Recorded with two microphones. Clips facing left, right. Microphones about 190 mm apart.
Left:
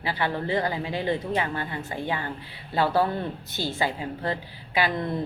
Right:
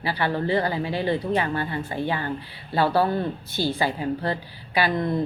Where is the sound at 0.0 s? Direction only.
20° left (ahead or behind).